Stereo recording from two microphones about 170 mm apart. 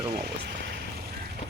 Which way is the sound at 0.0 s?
70° right (ahead or behind).